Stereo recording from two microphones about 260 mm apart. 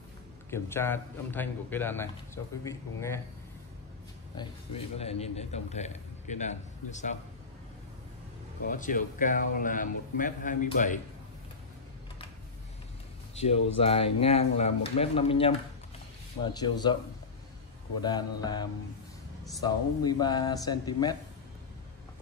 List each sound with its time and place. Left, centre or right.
0.5 s a man's voice: centre
4.4 s a man's voice: left
8.6 s a man's voice: left
13.7 s a man's voice: left
16.5 s a man's voice: centre
18.0 s a man's voice: centre